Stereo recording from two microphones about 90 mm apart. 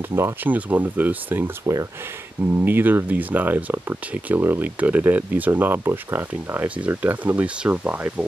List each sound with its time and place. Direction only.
0.1 s speech: 25° right (ahead or behind)
2.6 s speech: 20° right (ahead or behind)